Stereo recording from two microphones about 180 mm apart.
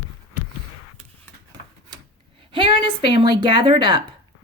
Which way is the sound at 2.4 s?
30° right (ahead or behind).